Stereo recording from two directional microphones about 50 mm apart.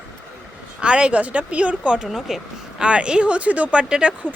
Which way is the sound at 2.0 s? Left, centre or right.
Centre.